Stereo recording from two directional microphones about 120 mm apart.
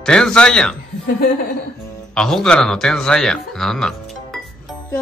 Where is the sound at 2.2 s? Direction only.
5° left (ahead or behind).